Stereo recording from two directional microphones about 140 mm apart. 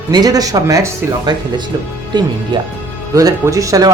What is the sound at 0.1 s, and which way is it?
Speech, 25° right (ahead or behind).